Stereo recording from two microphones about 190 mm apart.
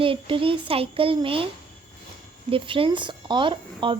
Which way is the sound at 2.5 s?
30° right (ahead or behind).